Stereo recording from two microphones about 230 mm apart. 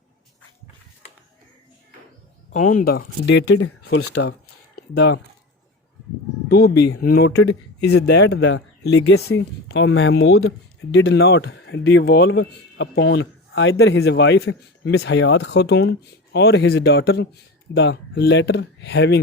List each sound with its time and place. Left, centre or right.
2.5 s speech: left
3.9 s speech: left
4.3 s a sound: left
6.5 s speech: left
9.1 s speech: left
10.9 s speech: left